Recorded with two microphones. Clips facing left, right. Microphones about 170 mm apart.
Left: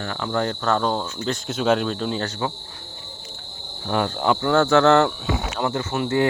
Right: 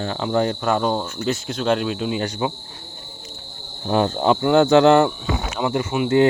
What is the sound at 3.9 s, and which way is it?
Speech, 25° right (ahead or behind).